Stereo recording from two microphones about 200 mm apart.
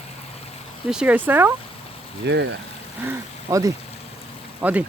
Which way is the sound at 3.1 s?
15° right (ahead or behind).